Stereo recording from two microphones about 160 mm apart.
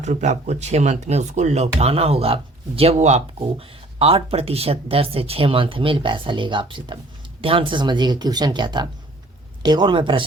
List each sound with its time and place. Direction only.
0.0 s speech: 45° right (ahead or behind); by 10.2 s 30° right (ahead or behind)